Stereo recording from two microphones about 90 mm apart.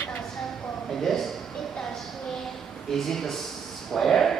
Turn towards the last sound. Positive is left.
turn(degrees=5)  # may be behind; listen again after turning